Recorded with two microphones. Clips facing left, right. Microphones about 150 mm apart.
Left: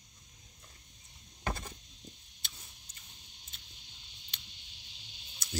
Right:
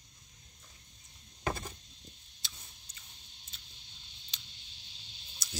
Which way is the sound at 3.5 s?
50° left (ahead or behind).